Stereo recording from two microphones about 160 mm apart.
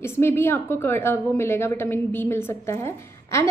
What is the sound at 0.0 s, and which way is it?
A woman's voice, 15° left (ahead or behind).